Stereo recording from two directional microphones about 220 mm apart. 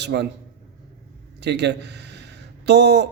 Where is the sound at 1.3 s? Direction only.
50° right (ahead or behind).